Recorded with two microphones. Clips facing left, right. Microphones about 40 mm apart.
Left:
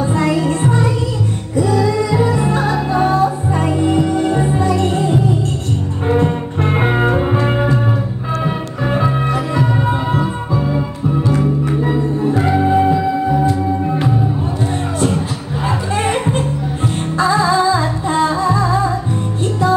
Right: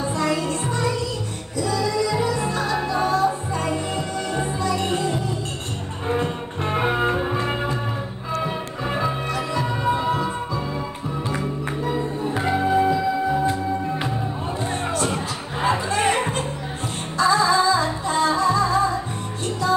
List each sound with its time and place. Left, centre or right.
0.0 s music: left
8.5 s music: centre
11.8 s music: left
12.4 s music: centre
16.1 s music: left